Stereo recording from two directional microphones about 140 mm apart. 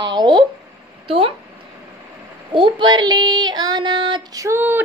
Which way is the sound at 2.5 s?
35° right (ahead or behind).